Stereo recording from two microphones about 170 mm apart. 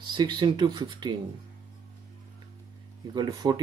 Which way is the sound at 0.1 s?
25° right (ahead or behind).